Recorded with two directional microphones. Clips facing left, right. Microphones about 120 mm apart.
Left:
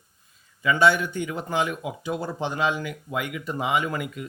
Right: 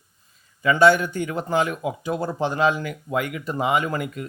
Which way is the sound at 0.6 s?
45° right (ahead or behind).